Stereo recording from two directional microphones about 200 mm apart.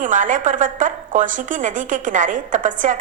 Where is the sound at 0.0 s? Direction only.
40° right (ahead or behind).